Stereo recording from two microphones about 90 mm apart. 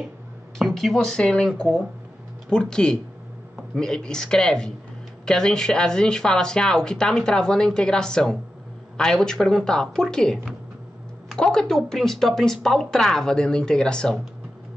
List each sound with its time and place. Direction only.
0.6 s speech: centre (ahead or behind)